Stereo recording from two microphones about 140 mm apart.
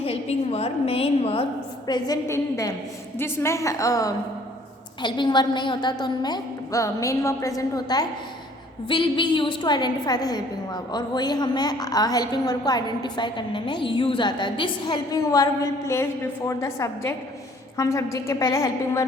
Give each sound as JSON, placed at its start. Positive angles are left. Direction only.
{"t": 0.0, "sound": "a woman's voice", "side_deg": 45}
{"t": 1.9, "sound": "a woman's voice", "side_deg": 25}
{"t": 5.0, "sound": "a woman's voice", "side_deg": 35}